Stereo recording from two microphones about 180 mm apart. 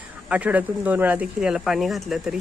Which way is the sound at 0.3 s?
5° right (ahead or behind).